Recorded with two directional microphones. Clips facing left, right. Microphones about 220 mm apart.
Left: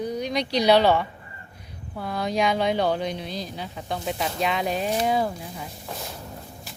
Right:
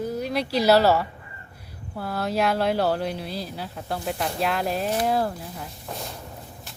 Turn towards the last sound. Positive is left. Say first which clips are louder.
# even
turn(degrees=0)  # may be behind; listen again after turning